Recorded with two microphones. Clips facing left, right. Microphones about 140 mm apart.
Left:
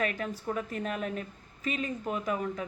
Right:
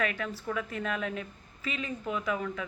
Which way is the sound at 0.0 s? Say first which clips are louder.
Even; 40° left (ahead or behind).